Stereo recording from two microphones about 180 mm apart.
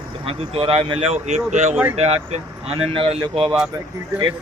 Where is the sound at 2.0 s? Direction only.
35° right (ahead or behind).